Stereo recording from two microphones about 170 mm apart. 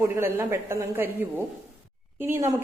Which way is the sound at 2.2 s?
15° right (ahead or behind).